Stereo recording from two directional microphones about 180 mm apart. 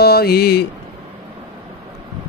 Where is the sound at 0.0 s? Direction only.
60° left (ahead or behind).